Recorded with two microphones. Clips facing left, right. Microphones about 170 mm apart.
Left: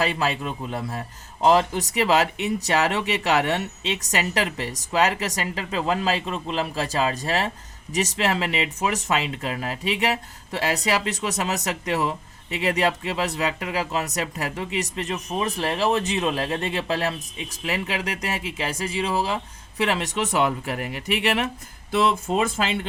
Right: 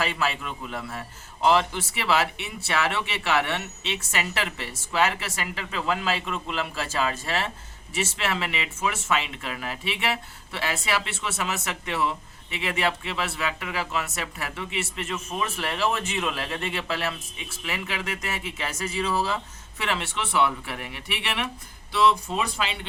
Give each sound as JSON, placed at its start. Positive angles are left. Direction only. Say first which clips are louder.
{"t": 0.0, "sound": "a man's voice", "louder": "left 4 dB", "side_deg": 35}
{"t": 19.8, "sound": "speech", "louder": "left 5 dB", "side_deg": 40}